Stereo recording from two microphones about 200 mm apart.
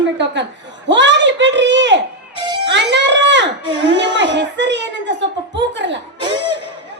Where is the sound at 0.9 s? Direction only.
60° right (ahead or behind).